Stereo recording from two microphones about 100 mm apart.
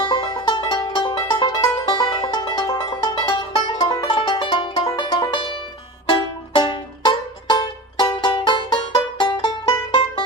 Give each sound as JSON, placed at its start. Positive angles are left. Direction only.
{"t": 0.1, "sound": "music", "side_deg": 55}